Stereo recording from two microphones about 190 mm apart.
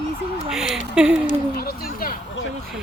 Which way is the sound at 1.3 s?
50° left (ahead or behind).